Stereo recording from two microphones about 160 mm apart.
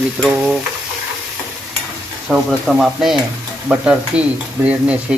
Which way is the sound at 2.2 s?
Centre (ahead or behind).